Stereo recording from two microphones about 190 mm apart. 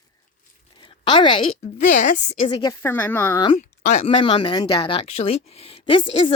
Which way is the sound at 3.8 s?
35° left (ahead or behind).